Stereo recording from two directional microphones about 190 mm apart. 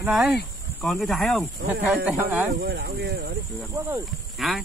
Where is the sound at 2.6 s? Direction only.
60° right (ahead or behind).